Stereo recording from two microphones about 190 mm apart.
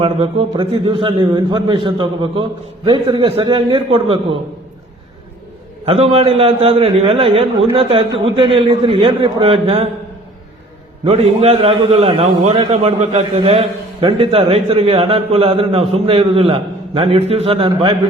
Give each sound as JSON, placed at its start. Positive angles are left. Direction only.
{"t": 0.0, "sound": "a man's voice", "side_deg": -30}
{"t": 5.8, "sound": "a man's voice", "side_deg": -30}
{"t": 11.0, "sound": "a man's voice", "side_deg": -30}